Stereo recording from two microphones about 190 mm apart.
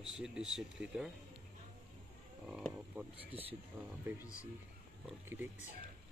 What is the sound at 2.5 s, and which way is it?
Speech, 5° right (ahead or behind).